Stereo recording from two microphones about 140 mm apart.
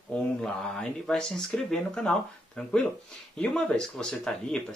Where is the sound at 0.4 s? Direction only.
5° left (ahead or behind).